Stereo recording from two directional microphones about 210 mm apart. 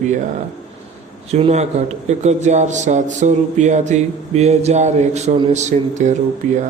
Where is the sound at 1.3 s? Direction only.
30° right (ahead or behind).